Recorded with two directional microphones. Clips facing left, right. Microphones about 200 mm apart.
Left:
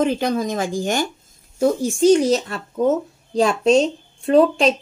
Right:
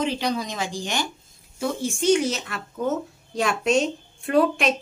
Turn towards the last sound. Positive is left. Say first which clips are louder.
# left 6 dB
turn(degrees=30)  # may be behind; listen again after turning